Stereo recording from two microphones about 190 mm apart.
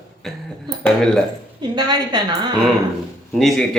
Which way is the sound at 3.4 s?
Centre (ahead or behind).